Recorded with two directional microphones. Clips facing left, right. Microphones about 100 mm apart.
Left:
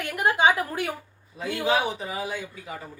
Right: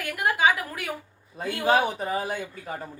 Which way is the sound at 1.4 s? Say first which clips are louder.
Right 2 dB; 45° right (ahead or behind).